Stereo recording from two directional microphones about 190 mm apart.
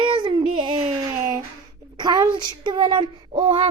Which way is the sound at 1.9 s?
20° right (ahead or behind).